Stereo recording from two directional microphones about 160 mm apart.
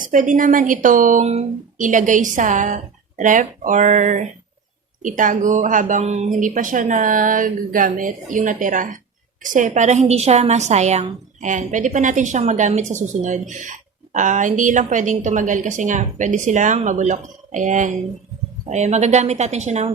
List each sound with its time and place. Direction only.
0.0 s a woman's voice: 55° right (ahead or behind)